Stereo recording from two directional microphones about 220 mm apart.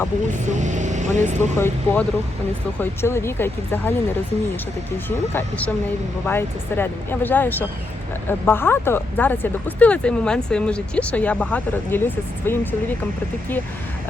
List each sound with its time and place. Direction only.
0.4 s speech: 35° right (ahead or behind)
1.5 s speech: 10° left (ahead or behind)
5.0 s speech: 10° left (ahead or behind)